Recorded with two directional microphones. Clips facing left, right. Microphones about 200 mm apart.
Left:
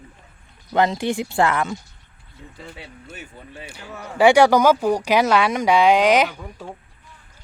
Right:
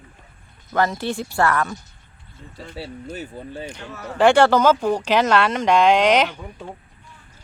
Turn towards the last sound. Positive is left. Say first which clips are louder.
# even
turn(degrees=10)  # may be behind; listen again after turning